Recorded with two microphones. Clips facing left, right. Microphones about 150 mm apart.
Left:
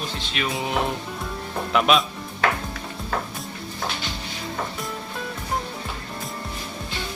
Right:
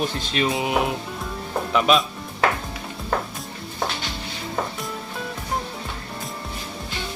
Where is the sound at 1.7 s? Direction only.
Centre (ahead or behind).